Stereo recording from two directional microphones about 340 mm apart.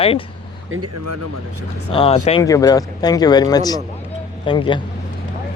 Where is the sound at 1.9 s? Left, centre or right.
Centre.